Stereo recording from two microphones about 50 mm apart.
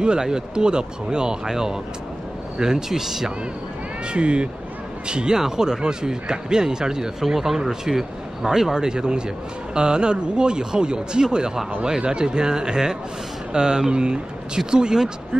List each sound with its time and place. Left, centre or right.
0.0 s speech: centre
4.1 s speech: right